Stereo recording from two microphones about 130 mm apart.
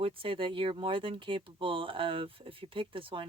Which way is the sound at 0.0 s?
45° right (ahead or behind).